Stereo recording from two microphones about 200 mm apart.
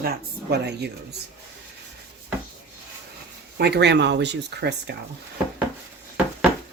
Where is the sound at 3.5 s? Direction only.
55° right (ahead or behind).